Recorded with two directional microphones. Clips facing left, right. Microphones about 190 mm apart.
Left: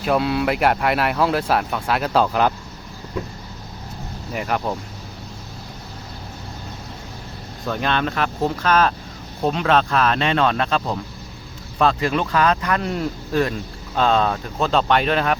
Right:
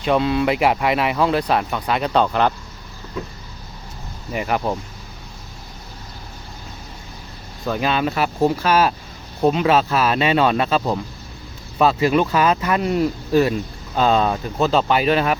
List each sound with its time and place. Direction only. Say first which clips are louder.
0.0 s speech: right 2 dB; 5° left (ahead or behind)
4.3 s speech: right 2 dB; 5° right (ahead or behind)
7.7 s speech: right 2 dB; 5° right (ahead or behind)